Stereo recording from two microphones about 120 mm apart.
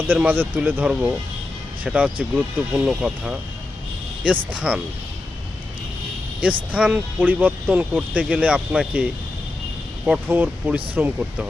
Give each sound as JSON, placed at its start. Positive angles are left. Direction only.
{"t": 0.1, "sound": "speech", "side_deg": -15}
{"t": 6.7, "sound": "speech", "side_deg": -10}
{"t": 10.1, "sound": "speech", "side_deg": -15}